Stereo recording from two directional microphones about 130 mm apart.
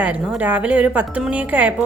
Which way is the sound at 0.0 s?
10° right (ahead or behind).